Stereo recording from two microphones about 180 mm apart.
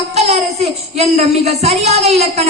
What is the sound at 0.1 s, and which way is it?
A woman's voice, 35° right (ahead or behind).